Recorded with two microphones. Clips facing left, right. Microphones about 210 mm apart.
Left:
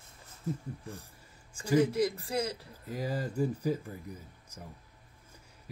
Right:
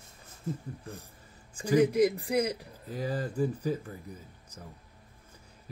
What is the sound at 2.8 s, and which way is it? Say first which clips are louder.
Speech: right 1 dB; 10° left (ahead or behind).